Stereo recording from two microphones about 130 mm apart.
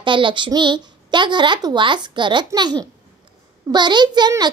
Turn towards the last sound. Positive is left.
turn(degrees=-35)  # may be behind; listen again after turning